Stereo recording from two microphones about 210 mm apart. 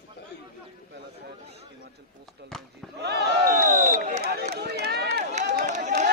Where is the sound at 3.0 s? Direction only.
45° right (ahead or behind).